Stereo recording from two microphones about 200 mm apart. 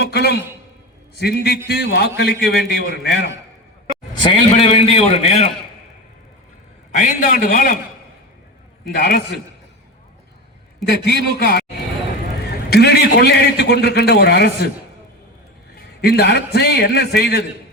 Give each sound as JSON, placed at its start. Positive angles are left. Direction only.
{"t": 0.0, "sound": "a sound", "side_deg": 55}
{"t": 1.1, "sound": "a man's voice", "side_deg": 55}
{"t": 4.5, "sound": "a man's voice", "side_deg": 30}
{"t": 6.9, "sound": "a man's voice", "side_deg": 40}
{"t": 9.0, "sound": "a man's voice", "side_deg": 50}
{"t": 11.1, "sound": "a man's voice", "side_deg": 55}
{"t": 12.7, "sound": "a man's voice", "side_deg": 55}
{"t": 16.0, "sound": "a man's voice", "side_deg": 55}